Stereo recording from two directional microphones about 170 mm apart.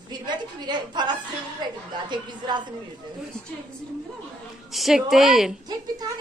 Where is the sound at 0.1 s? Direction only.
25° right (ahead or behind).